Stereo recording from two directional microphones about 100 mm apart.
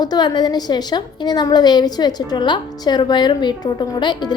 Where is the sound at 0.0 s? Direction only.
45° left (ahead or behind).